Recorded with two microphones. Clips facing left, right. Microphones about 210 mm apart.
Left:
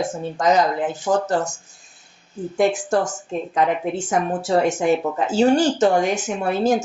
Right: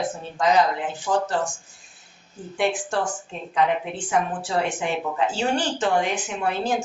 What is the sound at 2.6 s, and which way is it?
A woman's voice, 40° left (ahead or behind).